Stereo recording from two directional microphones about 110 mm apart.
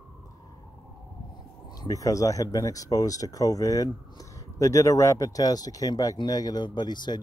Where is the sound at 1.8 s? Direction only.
30° left (ahead or behind).